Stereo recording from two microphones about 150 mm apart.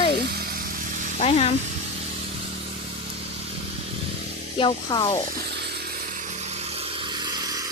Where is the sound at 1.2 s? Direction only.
45° left (ahead or behind).